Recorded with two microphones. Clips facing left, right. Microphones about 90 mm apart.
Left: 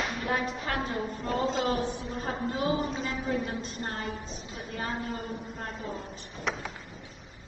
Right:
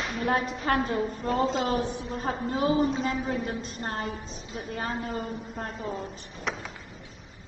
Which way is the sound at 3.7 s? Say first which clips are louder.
Right 2 dB; 40° right (ahead or behind).